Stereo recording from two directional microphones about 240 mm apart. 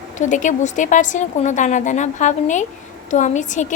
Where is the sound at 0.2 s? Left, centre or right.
Left.